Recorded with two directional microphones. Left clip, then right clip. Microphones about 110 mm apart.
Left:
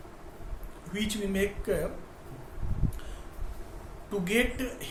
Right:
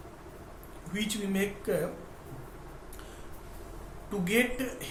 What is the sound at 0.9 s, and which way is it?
Speech, 25° left (ahead or behind).